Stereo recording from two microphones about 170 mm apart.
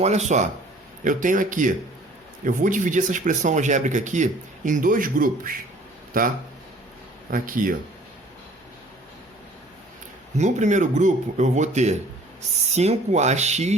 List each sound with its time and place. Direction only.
0.0 s speech: 40° right (ahead or behind)
10.3 s speech: 45° right (ahead or behind)